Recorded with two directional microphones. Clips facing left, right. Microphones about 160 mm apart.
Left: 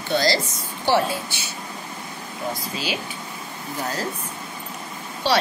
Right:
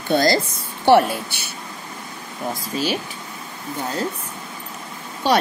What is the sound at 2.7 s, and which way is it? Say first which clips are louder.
Speech: right 7 dB; 45° right (ahead or behind).